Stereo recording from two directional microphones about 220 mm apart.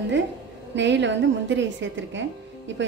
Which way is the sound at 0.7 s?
55° right (ahead or behind).